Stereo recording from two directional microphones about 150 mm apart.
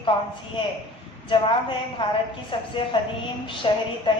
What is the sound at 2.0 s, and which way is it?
A woman's voice, 35° left (ahead or behind).